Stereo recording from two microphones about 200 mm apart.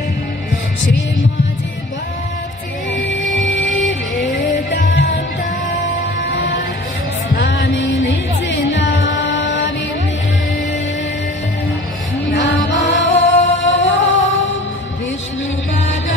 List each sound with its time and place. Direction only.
3.3 s music: 65° left (ahead or behind)
6.3 s music: 65° left (ahead or behind)
12.3 s music: 65° left (ahead or behind)